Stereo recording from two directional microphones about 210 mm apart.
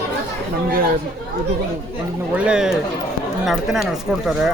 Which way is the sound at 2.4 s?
5° right (ahead or behind).